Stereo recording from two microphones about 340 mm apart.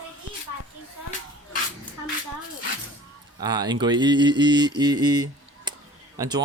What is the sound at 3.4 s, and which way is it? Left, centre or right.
Speech, centre.